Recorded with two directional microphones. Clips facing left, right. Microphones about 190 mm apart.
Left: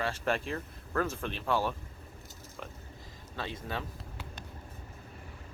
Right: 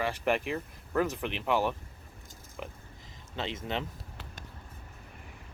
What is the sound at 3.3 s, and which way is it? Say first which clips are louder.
Speech: right 3 dB; 20° right (ahead or behind).